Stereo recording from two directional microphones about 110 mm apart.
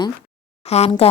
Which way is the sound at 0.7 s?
70° left (ahead or behind).